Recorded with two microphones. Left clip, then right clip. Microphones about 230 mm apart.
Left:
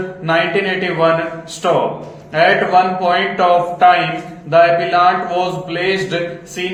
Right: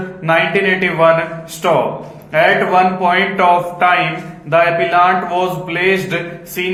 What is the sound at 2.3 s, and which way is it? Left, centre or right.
A man's voice, right.